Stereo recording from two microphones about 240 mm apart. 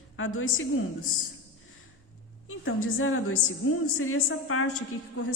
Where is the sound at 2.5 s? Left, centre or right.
Left.